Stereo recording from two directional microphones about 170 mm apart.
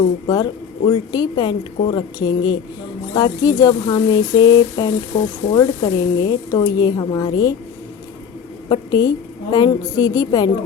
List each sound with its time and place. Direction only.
0.9 s speech: 25° left (ahead or behind)
8.7 s speech: 25° left (ahead or behind)